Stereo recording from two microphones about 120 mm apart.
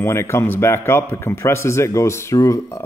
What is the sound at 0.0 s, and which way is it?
A man's voice, 20° left (ahead or behind).